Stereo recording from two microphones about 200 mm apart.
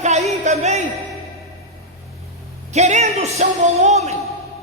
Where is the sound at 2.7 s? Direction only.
35° right (ahead or behind).